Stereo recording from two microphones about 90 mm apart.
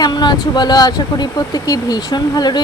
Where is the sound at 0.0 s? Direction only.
50° left (ahead or behind).